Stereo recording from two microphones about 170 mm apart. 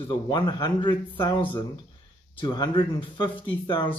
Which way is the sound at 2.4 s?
25° left (ahead or behind).